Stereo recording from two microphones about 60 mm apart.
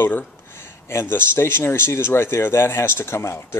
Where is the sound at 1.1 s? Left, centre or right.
Left.